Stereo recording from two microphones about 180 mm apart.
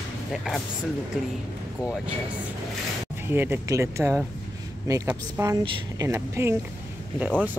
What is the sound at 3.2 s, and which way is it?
Speech, 10° right (ahead or behind).